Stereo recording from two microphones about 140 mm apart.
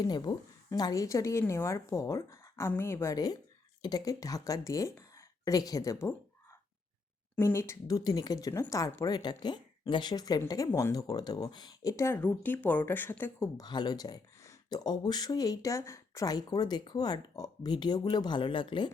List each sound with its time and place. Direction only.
0.0 s speech: 30° left (ahead or behind)
7.3 s speech: 20° left (ahead or behind)
13.6 s speech: 30° left (ahead or behind)